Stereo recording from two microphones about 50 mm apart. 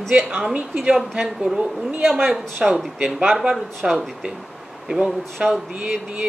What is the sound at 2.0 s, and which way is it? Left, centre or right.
Speech, centre.